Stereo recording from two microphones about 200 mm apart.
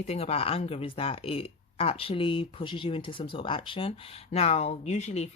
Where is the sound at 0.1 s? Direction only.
30° left (ahead or behind).